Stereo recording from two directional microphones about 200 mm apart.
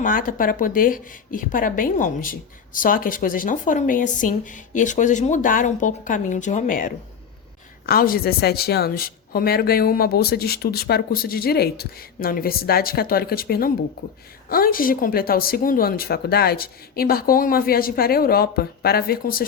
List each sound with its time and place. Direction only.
0.0 s a woman's voice: 45° left (ahead or behind)